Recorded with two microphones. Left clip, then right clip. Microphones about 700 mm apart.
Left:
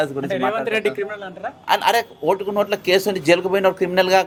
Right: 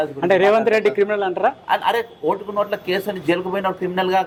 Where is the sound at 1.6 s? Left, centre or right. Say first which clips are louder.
Left 2 dB; left.